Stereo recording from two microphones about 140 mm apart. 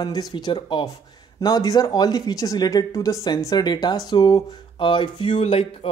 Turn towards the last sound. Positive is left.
turn(degrees=40)  # may be behind; listen again after turning